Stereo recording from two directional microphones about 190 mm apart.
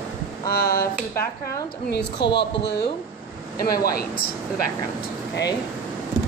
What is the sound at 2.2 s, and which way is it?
Speech, 65° left (ahead or behind).